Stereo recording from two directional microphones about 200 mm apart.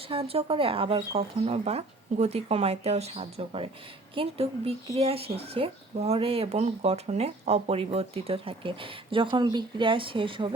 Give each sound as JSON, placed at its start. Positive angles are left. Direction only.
{"t": 0.1, "sound": "speech", "side_deg": -30}